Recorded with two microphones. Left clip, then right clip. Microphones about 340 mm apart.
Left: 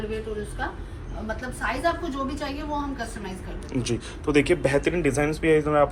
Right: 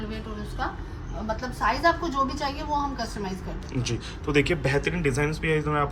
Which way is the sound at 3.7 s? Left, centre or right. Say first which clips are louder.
Left 4 dB; centre.